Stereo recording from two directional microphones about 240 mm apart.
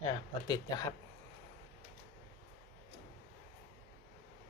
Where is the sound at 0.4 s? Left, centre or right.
Centre.